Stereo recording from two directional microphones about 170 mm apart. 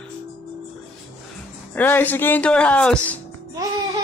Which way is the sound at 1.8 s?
10° left (ahead or behind).